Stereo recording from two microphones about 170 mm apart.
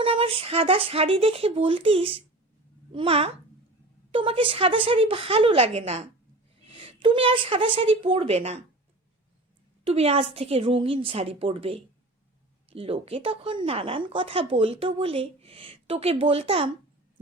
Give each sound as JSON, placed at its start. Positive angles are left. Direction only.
{"t": 0.0, "sound": "speech", "side_deg": -30}
{"t": 9.8, "sound": "speech", "side_deg": -35}